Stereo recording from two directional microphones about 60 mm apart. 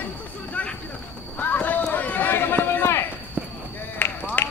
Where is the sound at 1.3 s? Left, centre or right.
Left.